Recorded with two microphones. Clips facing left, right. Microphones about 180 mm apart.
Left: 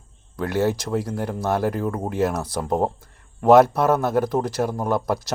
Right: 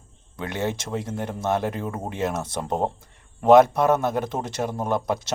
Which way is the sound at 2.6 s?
Centre (ahead or behind).